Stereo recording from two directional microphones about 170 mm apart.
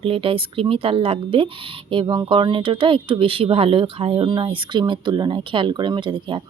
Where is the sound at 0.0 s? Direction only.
35° right (ahead or behind).